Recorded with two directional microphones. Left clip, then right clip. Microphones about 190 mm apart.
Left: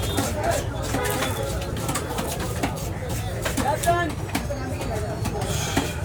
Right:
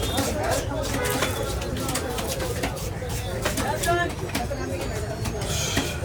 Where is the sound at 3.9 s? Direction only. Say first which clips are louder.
Left 2 dB; 15° left (ahead or behind).